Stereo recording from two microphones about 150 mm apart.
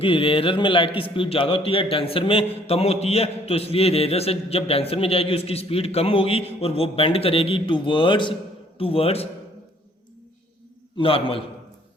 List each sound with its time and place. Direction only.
0.0 s a man's voice: 35° left (ahead or behind)
10.9 s a man's voice: 35° left (ahead or behind)